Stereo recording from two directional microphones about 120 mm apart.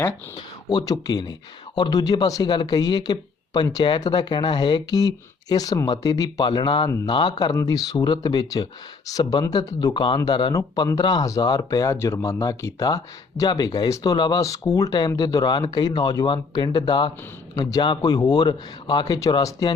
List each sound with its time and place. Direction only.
0.7 s speech: 35° left (ahead or behind)